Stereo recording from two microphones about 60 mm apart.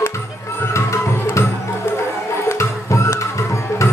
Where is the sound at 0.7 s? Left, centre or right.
Left.